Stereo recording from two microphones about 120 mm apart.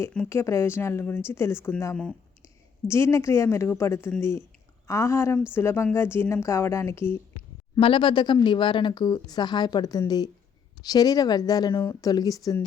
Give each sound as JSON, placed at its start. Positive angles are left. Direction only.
{"t": 0.3, "sound": "a woman's voice", "side_deg": 25}
{"t": 2.8, "sound": "a woman's voice", "side_deg": 20}
{"t": 7.8, "sound": "a woman's voice", "side_deg": 45}